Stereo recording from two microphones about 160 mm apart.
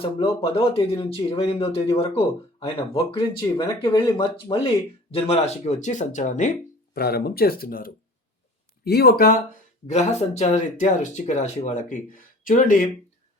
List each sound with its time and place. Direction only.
0.0 s speech: 35° left (ahead or behind)
6.9 s speech: 80° left
8.8 s speech: 80° left
9.8 s speech: 45° left (ahead or behind)